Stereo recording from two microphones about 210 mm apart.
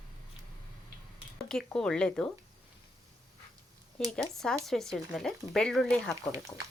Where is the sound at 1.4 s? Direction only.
5° left (ahead or behind).